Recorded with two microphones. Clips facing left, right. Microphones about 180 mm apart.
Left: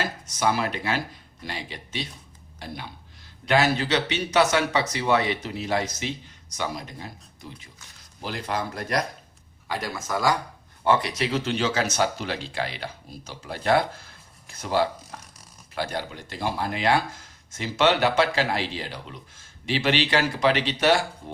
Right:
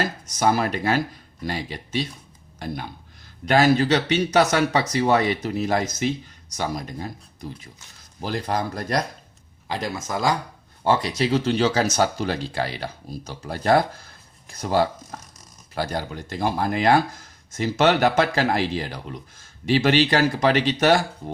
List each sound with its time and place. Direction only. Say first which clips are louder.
0.0 s speech: right 3 dB; 40° right (ahead or behind)
9.6 s speech: right 2 dB; 25° right (ahead or behind); by 21.3 s 45° right (ahead or behind)